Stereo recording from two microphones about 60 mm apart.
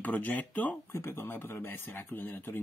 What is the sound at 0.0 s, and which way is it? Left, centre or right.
Speech, left.